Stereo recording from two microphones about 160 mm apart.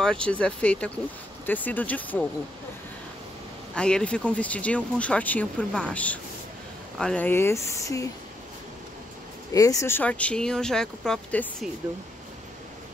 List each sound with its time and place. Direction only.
0.0 s speech: 5° left (ahead or behind)
3.7 s speech: 5° left (ahead or behind)
9.5 s speech: 20° left (ahead or behind); by 11.7 s 5° left (ahead or behind)